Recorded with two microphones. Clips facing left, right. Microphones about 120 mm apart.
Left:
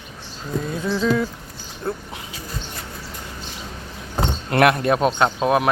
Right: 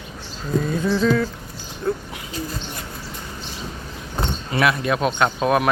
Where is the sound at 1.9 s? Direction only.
35° left (ahead or behind).